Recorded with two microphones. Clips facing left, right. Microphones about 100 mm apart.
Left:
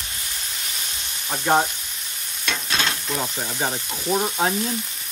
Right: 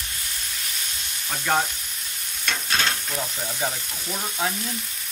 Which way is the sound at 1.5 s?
20° left (ahead or behind).